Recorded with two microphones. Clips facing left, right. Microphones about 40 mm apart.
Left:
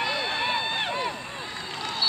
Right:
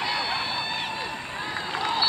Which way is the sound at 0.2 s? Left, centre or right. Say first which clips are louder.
Left 1 dB; left.